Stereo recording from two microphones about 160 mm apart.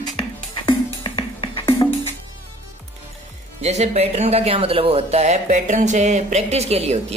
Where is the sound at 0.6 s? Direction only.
30° left (ahead or behind).